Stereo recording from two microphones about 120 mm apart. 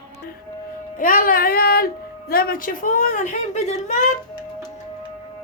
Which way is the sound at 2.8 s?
90° left.